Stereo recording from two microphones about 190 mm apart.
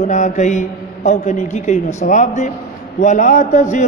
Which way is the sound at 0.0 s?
40° left (ahead or behind).